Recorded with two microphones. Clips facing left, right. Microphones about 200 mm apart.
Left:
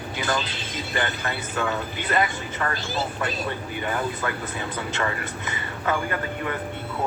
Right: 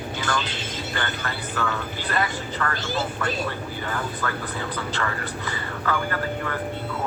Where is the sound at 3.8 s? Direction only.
20° left (ahead or behind).